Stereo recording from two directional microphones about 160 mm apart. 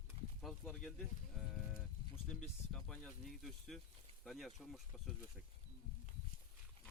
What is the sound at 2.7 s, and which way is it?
Speech, 5° left (ahead or behind).